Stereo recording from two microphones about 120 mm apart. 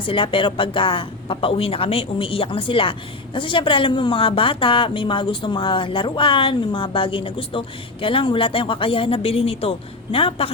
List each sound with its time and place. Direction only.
0.0 s a woman's voice: 45° left (ahead or behind)